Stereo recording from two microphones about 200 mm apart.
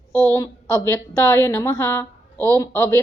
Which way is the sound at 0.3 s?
15° left (ahead or behind).